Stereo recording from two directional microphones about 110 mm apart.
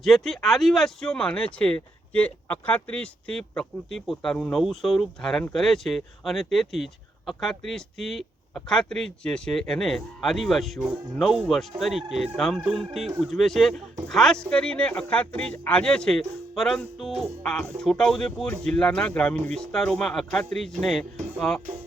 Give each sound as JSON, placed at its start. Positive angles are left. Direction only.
{"t": 0.0, "sound": "speech", "side_deg": 0}